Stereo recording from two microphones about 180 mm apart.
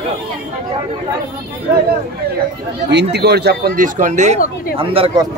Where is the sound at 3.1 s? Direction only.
65° right (ahead or behind).